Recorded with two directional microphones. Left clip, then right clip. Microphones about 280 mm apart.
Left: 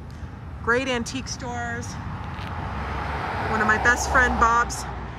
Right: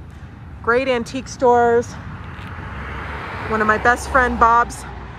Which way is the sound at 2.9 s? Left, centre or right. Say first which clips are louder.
Left 1 dB; left.